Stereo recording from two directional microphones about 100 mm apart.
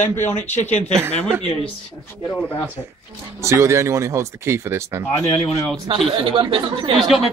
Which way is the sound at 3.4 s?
30° right (ahead or behind).